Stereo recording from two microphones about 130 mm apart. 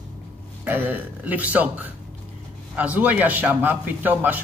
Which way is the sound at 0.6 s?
15° right (ahead or behind).